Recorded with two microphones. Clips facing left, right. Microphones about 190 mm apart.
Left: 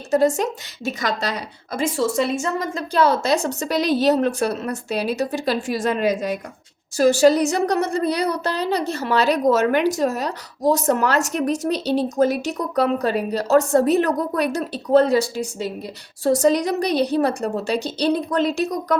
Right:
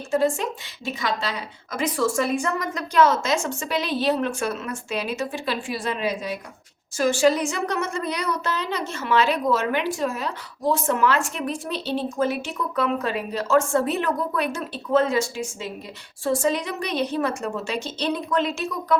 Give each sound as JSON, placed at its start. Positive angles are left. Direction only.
{"t": 0.1, "sound": "a woman's voice", "side_deg": 40}
{"t": 1.8, "sound": "a woman's voice", "side_deg": 20}